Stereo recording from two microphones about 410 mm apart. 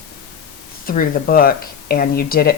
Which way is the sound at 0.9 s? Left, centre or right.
Left.